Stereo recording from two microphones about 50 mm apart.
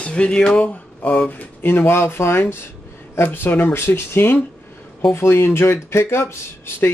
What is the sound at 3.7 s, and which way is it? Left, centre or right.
Speech, left.